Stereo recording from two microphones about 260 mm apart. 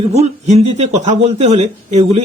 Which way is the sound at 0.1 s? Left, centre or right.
Right.